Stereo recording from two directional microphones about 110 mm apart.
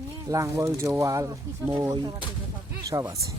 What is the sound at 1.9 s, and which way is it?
Speech, 35° right (ahead or behind).